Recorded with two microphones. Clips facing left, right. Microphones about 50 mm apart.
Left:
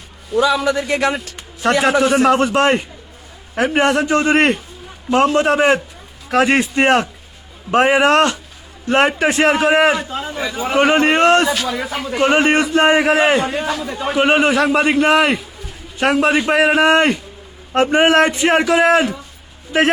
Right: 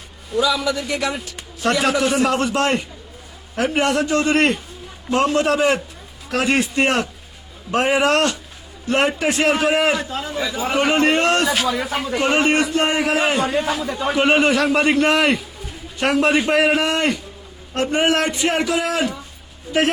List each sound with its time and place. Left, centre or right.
0.6 s speech: left
1.7 s a man's voice: left
10.0 s a man's voice: centre
10.8 s a man's voice: left
11.7 s speech: centre
12.3 s a man's voice: left
13.7 s a man's voice: centre
16.8 s a man's voice: left